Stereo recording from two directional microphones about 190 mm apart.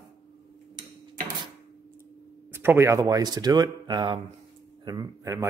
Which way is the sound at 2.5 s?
10° right (ahead or behind).